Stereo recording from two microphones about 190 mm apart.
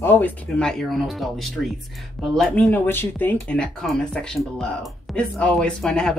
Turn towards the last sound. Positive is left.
turn(degrees=5)  # may be behind; listen again after turning